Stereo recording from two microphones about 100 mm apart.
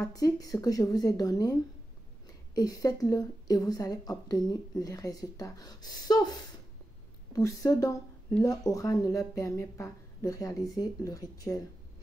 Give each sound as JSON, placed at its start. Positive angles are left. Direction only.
{"t": 0.0, "sound": "speech", "side_deg": 35}